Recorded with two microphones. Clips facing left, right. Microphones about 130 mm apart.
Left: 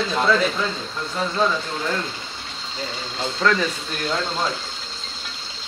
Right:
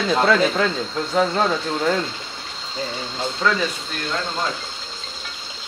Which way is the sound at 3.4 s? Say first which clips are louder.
Left 1 dB; 5° right (ahead or behind).